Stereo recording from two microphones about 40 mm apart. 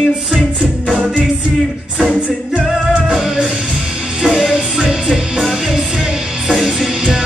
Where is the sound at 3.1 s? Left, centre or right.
Centre.